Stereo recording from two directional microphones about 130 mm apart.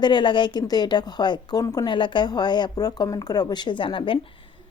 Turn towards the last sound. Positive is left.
turn(degrees=40)  # may be behind; listen again after turning